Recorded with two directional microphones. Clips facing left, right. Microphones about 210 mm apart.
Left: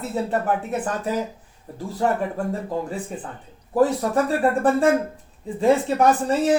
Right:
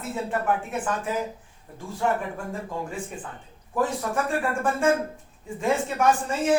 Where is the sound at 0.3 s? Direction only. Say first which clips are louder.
Left 3 dB; 35° left (ahead or behind).